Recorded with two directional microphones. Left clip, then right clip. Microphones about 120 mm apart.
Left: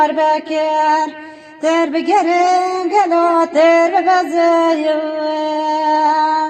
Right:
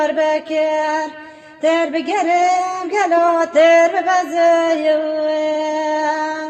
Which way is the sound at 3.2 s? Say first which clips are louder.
Left 1 dB; 25° left (ahead or behind).